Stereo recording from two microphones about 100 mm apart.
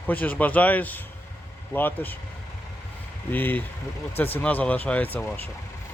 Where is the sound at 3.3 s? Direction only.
20° left (ahead or behind).